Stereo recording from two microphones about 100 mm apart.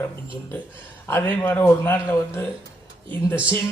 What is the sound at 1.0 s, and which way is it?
Speech, 25° left (ahead or behind).